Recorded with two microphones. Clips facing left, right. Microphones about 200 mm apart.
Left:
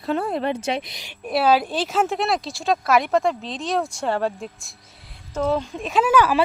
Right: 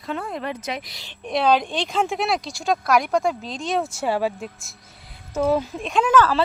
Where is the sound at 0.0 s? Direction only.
35° left (ahead or behind); by 1.1 s 20° left (ahead or behind).